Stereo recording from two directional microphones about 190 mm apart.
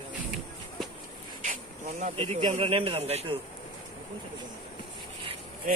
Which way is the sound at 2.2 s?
30° right (ahead or behind).